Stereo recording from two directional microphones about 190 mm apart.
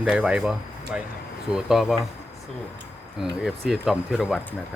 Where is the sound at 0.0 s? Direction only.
5° right (ahead or behind).